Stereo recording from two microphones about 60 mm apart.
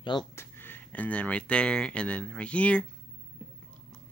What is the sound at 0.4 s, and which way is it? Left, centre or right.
Speech, left.